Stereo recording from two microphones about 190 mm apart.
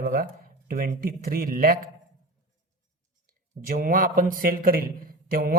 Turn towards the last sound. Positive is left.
turn(degrees=-50)  # may be behind; listen again after turning